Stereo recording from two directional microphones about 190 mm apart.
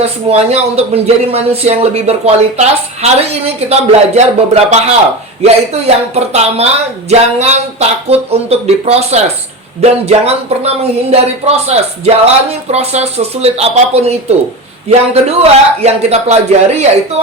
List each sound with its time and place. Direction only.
0.0 s speech: 35° right (ahead or behind)